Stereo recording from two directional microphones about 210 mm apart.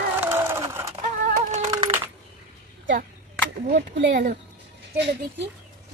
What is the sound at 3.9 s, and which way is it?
Speech, 60° right (ahead or behind).